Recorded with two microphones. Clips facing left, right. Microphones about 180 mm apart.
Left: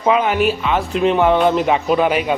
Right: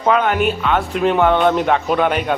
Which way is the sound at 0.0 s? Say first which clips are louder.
Even; 5° left (ahead or behind).